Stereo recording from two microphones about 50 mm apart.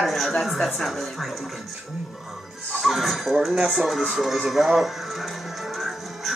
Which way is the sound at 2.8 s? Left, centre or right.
Centre.